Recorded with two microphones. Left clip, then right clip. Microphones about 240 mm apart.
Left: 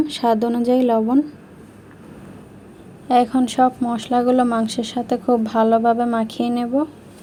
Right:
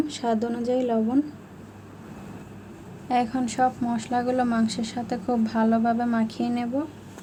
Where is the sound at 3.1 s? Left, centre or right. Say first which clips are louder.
Left 8 dB; left.